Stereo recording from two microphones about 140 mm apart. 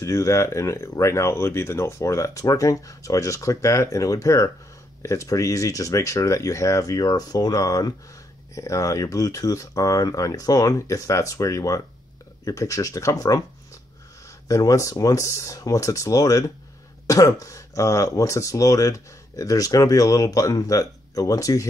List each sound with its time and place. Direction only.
0.0 s speech: 20° left (ahead or behind)
14.5 s speech: 25° left (ahead or behind)